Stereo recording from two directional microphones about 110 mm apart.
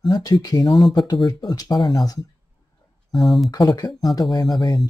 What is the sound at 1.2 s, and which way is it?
Speech, 40° left (ahead or behind).